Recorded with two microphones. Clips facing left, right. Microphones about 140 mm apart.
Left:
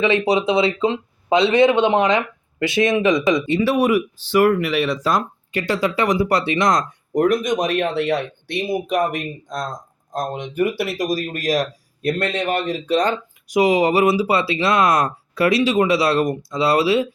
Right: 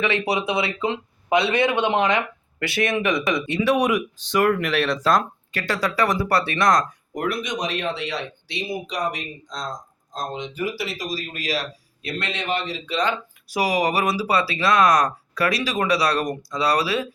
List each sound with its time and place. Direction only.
0.0 s speech: 20° left (ahead or behind)
7.1 s speech: 40° left (ahead or behind)
13.5 s speech: 25° left (ahead or behind)